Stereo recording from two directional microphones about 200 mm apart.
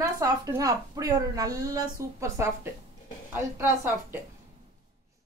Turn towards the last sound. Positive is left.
turn(degrees=-10)  # may be behind; listen again after turning